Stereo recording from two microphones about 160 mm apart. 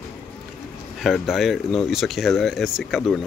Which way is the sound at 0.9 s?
Centre (ahead or behind).